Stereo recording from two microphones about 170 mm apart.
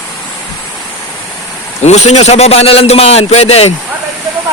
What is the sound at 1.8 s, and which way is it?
A man's voice, 40° left (ahead or behind).